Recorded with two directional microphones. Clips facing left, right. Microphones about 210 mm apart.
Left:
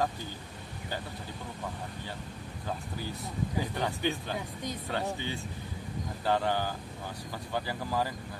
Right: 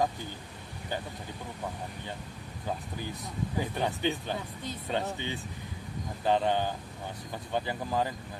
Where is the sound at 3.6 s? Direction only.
15° right (ahead or behind).